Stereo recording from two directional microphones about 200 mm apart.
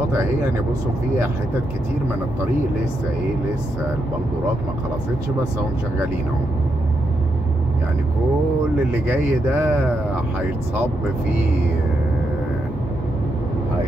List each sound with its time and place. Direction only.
9.0 s speech: 10° right (ahead or behind)